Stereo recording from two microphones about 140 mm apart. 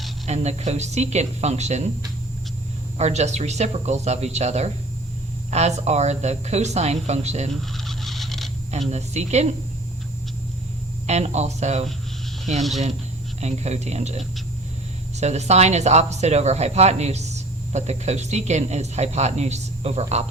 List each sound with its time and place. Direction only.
0.3 s speech: 50° right (ahead or behind)
3.0 s speech: 55° right (ahead or behind)
7.8 s fowl: centre (ahead or behind)
8.9 s speech: 50° right (ahead or behind)
11.0 s speech: 55° right (ahead or behind)
13.4 s speech: 50° right (ahead or behind)